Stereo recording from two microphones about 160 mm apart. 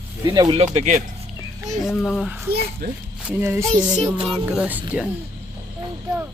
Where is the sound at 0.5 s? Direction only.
45° right (ahead or behind).